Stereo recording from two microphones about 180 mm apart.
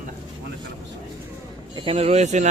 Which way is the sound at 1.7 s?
30° right (ahead or behind).